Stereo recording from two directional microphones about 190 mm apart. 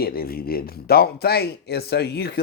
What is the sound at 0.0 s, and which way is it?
Speech, 50° left (ahead or behind).